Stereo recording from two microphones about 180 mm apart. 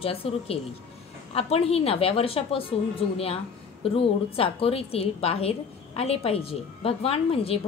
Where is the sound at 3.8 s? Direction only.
30° left (ahead or behind).